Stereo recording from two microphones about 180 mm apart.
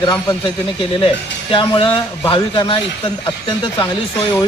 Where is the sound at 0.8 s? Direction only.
30° left (ahead or behind).